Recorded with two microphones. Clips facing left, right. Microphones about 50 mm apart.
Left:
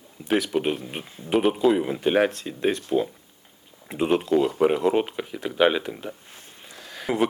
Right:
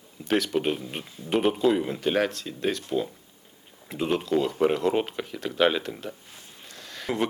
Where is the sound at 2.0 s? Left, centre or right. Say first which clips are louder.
Left 4 dB; centre.